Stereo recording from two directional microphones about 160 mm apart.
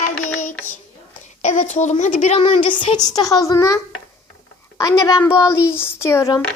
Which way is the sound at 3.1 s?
20° left (ahead or behind).